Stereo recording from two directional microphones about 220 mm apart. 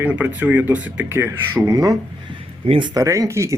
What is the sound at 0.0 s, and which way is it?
Speech, 5° right (ahead or behind).